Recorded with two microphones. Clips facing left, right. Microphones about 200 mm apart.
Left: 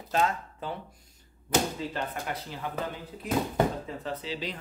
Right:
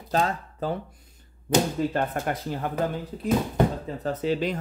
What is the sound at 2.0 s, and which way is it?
Speech, 50° right (ahead or behind).